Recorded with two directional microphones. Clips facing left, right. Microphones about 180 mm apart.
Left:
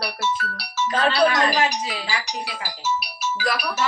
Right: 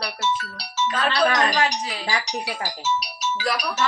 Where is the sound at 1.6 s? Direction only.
25° left (ahead or behind).